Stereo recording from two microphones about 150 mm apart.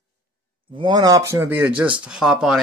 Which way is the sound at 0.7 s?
30° right (ahead or behind).